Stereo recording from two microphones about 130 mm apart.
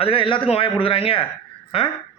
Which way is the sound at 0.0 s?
45° left (ahead or behind).